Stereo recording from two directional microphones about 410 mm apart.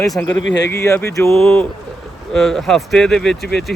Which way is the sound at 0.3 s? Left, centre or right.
Left.